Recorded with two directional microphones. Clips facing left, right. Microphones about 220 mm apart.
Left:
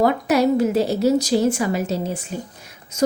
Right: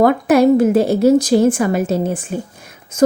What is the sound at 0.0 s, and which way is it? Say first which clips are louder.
Speech: right 6 dB; 50° right (ahead or behind).